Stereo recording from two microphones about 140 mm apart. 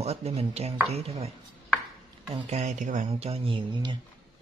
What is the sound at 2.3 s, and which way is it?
Speech, 50° right (ahead or behind).